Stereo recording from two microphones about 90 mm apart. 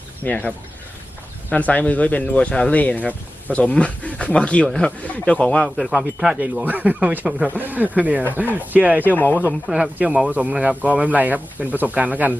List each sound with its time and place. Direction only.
0.3 s speech: 15° left (ahead or behind)
5.6 s speech: centre (ahead or behind)
6.4 s speech: 20° right (ahead or behind)
9.5 s speech: 5° right (ahead or behind)
10.2 s speech: 15° right (ahead or behind)